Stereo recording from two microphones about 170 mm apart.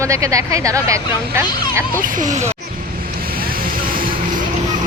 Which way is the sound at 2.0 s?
50° right (ahead or behind).